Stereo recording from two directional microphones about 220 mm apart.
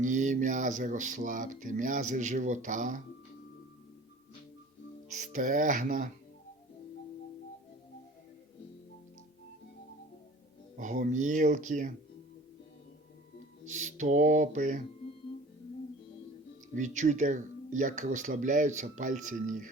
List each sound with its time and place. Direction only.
0.0 s speech: 35° right (ahead or behind)
5.1 s speech: 35° right (ahead or behind)
10.8 s speech: 35° right (ahead or behind)
13.7 s speech: 35° right (ahead or behind)
16.7 s speech: 35° right (ahead or behind)